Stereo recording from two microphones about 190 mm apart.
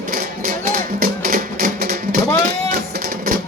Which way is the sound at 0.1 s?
50° right (ahead or behind).